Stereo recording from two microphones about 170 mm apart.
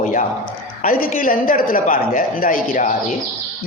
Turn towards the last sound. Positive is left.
turn(degrees=50)  # may be behind; listen again after turning